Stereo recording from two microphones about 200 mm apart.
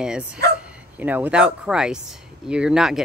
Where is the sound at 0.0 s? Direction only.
5° right (ahead or behind).